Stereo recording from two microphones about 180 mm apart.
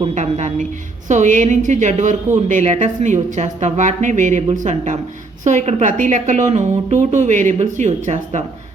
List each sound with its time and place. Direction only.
0.0 s a woman's voice: 40° right (ahead or behind)